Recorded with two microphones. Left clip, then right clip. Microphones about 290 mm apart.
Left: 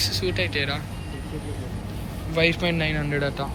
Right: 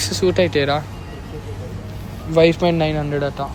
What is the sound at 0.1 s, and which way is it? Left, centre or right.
Speech, centre.